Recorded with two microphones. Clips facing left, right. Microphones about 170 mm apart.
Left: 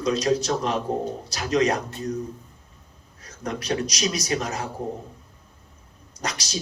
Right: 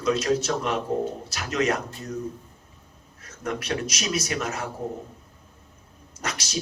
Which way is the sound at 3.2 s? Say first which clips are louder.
Even; 30° left (ahead or behind).